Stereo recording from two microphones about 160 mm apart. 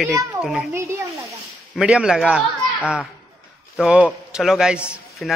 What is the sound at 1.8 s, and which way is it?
Speech, 5° right (ahead or behind).